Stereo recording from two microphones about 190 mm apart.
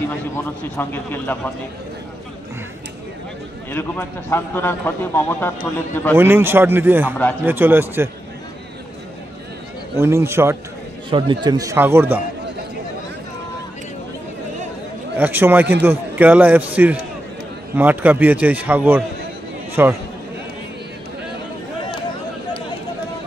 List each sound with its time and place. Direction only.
0.7 s a man's voice: 10° left (ahead or behind)
3.7 s a man's voice: 10° left (ahead or behind)
6.1 s a man's voice: 10° right (ahead or behind)
9.9 s a man's voice: 15° right (ahead or behind)
11.1 s a man's voice: 25° right (ahead or behind)
15.1 s a man's voice: 10° right (ahead or behind)